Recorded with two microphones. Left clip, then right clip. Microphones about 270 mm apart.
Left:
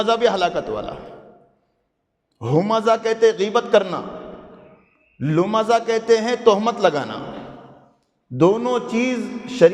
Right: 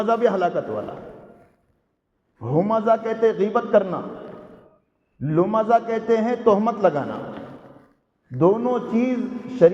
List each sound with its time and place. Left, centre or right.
0.0 s a man's voice: left
2.4 s a man's voice: left
5.2 s a man's voice: left
8.4 s a man's voice: left